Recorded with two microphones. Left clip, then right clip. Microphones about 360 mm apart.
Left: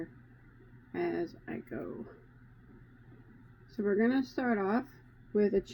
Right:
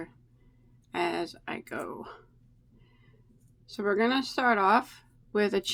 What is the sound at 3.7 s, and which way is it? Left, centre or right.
Speech, centre.